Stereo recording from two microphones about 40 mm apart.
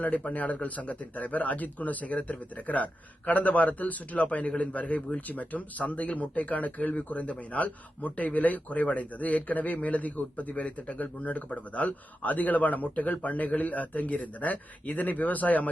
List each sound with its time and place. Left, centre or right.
0.0 s speech: left